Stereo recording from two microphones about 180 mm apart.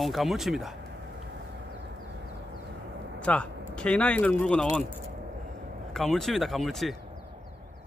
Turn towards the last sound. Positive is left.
turn(degrees=0)  # may be behind; listen again after turning